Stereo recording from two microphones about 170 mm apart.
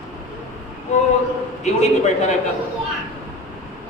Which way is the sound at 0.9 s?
40° left (ahead or behind).